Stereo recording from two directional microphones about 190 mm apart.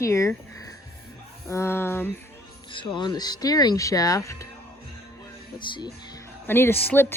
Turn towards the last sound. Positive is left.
turn(degrees=10)  # may be behind; listen again after turning